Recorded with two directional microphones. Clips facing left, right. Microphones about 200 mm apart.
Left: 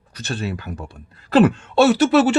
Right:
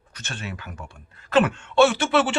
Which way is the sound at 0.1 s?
35° left (ahead or behind).